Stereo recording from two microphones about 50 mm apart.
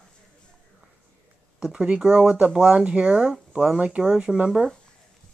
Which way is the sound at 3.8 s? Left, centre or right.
Right.